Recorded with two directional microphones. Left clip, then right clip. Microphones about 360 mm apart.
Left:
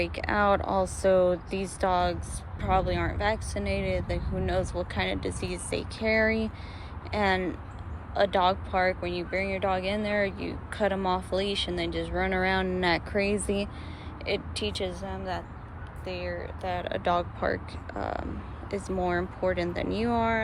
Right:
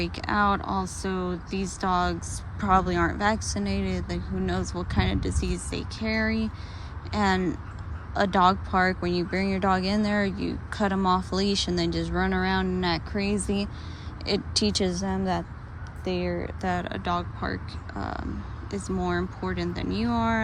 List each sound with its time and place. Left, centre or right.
0.0 s a woman's voice: centre
18.8 s speech: centre
19.4 s speech: centre